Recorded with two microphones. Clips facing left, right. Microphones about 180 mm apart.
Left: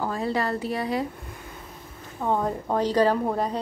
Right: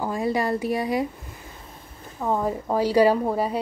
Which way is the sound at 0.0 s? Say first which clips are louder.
Right 2 dB; 15° right (ahead or behind).